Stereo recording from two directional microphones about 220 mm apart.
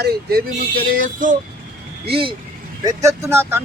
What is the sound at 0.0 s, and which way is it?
Speech, 45° right (ahead or behind).